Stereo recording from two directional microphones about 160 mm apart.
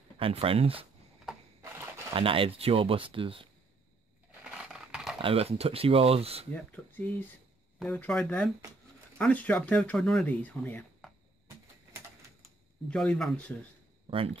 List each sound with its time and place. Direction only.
0.2 s speech: 35° right (ahead or behind)
1.6 s a sound: 15° right (ahead or behind)
2.1 s speech: 35° right (ahead or behind)
4.3 s a sound: 5° right (ahead or behind)
5.2 s speech: 40° right (ahead or behind)
6.5 s speech: 10° left (ahead or behind)
12.9 s speech: 5° left (ahead or behind)
14.1 s speech: 35° right (ahead or behind)